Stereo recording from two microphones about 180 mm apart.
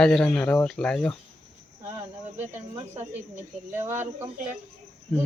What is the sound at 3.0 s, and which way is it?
Speech, 10° right (ahead or behind).